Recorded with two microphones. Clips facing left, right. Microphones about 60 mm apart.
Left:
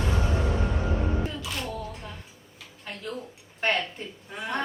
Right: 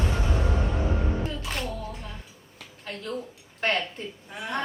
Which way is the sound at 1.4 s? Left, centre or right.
Right.